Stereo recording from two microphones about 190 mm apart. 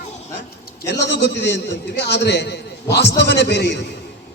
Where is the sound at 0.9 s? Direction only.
65° left (ahead or behind).